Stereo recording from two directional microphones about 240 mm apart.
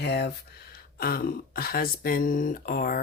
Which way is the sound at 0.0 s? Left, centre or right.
Left.